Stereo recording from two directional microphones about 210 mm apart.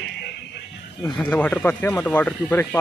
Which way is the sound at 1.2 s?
5° left (ahead or behind).